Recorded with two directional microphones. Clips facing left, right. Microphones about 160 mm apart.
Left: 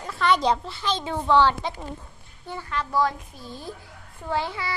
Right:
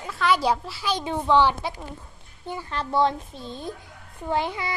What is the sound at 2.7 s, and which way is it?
A child's voice, 30° right (ahead or behind).